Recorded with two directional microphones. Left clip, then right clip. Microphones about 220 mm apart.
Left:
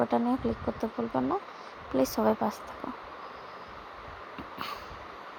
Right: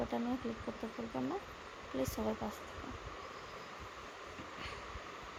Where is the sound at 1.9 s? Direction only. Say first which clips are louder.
Left 12 dB; 20° left (ahead or behind).